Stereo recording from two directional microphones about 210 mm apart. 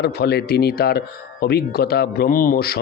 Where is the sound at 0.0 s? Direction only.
50° left (ahead or behind).